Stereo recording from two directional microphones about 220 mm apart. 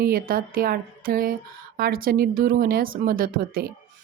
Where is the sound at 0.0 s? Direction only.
40° right (ahead or behind).